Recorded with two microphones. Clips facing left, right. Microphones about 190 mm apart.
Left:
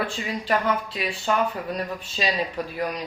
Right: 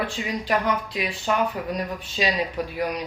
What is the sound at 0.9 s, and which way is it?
Speech, 15° right (ahead or behind).